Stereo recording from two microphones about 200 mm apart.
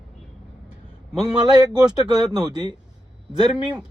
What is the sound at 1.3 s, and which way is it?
Speech, 20° right (ahead or behind).